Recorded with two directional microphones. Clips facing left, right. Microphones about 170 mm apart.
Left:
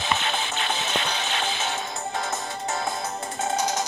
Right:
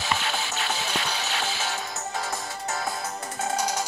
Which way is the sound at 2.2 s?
25° left (ahead or behind).